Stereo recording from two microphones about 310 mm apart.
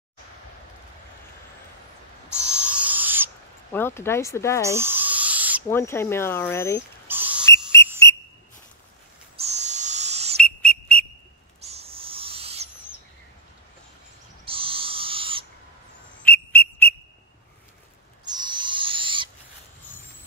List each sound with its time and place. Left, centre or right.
2.6 s owl: centre
3.7 s speech: centre
4.6 s owl: centre
5.7 s speech: centre
7.1 s rodents: centre
7.8 s whistle: centre
9.4 s owl: right
10.4 s whistle: centre
11.6 s owl: centre
14.4 s owl: centre
16.2 s whistle: centre
18.2 s owl: centre